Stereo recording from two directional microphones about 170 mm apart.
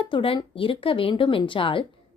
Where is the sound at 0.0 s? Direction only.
30° left (ahead or behind).